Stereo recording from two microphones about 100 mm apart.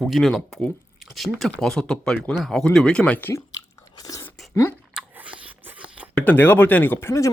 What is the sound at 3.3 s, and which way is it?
Biting, 35° left (ahead or behind).